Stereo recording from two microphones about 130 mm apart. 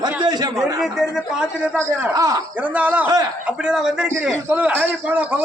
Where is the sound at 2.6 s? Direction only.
10° right (ahead or behind).